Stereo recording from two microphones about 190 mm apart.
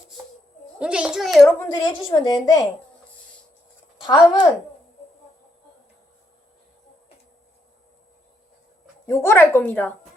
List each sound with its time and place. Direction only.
0.8 s a child's voice: 5° right (ahead or behind)
2.0 s a woman's voice: 20° left (ahead or behind)
4.0 s a woman's voice: 25° left (ahead or behind)
9.0 s a woman's voice: 10° left (ahead or behind)